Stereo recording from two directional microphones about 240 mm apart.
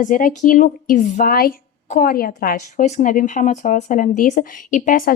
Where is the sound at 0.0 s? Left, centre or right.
Left.